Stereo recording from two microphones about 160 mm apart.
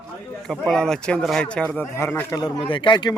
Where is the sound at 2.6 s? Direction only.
30° left (ahead or behind).